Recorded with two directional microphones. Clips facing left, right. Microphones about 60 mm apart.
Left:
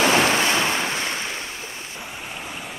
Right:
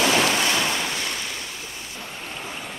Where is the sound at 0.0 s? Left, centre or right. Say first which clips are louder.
Left 2 dB; left.